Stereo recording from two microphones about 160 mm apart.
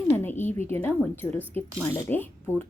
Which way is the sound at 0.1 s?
15° left (ahead or behind).